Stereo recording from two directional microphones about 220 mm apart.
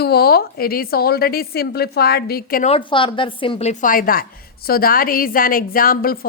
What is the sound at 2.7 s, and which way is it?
A woman's voice, 20° left (ahead or behind).